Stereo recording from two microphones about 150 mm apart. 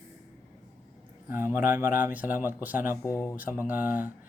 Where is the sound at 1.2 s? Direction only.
15° right (ahead or behind).